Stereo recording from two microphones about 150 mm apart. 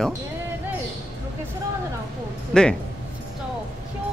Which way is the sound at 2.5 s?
5° left (ahead or behind).